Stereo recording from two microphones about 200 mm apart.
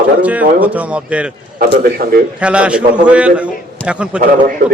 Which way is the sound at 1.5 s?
45° right (ahead or behind).